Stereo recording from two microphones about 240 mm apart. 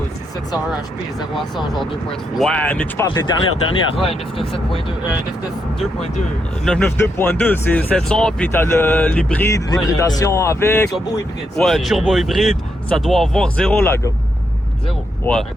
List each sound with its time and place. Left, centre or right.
2.4 s speech: centre; by 4.4 s left
6.7 s speech: centre